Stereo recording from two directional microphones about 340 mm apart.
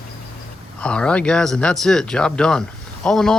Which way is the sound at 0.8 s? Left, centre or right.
Centre.